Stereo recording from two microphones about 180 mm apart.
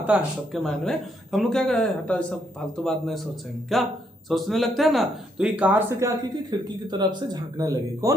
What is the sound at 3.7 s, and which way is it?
A man's voice, centre (ahead or behind).